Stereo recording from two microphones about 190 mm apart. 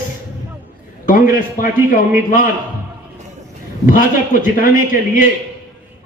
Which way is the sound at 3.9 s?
45° left (ahead or behind).